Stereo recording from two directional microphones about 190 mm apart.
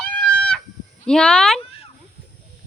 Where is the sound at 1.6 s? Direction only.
30° left (ahead or behind).